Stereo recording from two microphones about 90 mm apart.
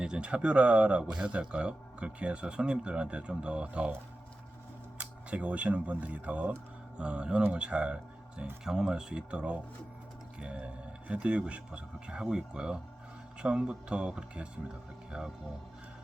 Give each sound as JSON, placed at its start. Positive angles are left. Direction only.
{"t": 0.0, "sound": "speech", "side_deg": -10}
{"t": 4.9, "sound": "speech", "side_deg": -15}